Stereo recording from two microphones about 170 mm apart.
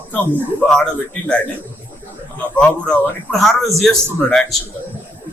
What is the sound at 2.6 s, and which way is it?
A man's voice, 5° left (ahead or behind).